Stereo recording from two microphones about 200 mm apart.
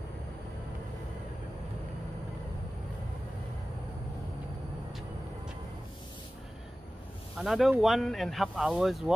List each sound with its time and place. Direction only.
7.3 s speech: centre (ahead or behind)